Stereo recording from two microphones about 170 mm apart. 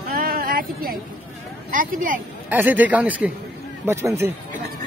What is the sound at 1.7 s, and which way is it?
Speech, 55° right (ahead or behind).